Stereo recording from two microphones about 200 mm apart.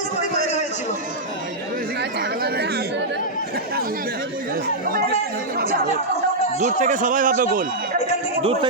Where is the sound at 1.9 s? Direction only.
55° right (ahead or behind).